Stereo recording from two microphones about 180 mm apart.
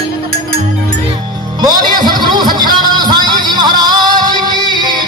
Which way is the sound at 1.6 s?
25° right (ahead or behind).